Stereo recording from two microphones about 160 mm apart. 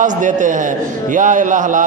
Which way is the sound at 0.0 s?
55° right (ahead or behind).